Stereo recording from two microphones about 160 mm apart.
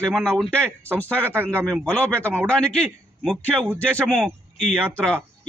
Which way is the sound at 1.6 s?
5° left (ahead or behind).